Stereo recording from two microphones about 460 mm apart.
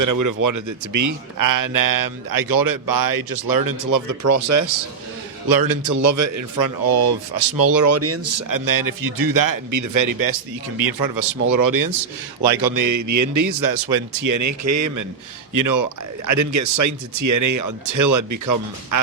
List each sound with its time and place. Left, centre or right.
0.0 s a man's voice: right
5.5 s a man's voice: right